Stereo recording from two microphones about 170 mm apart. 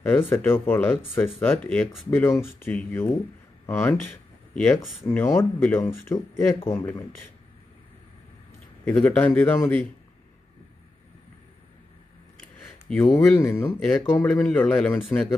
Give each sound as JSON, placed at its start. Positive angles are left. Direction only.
{"t": 0.0, "sound": "speech", "side_deg": 10}
{"t": 4.1, "sound": "a sound", "side_deg": 5}
{"t": 5.0, "sound": "speech", "side_deg": 15}
{"t": 8.8, "sound": "speech", "side_deg": 10}
{"t": 12.8, "sound": "speech", "side_deg": 10}